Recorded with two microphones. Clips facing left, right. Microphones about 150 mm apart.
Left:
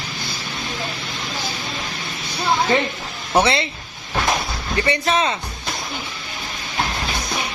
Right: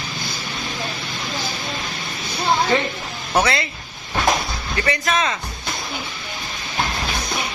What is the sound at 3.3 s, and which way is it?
Speech, 30° left (ahead or behind).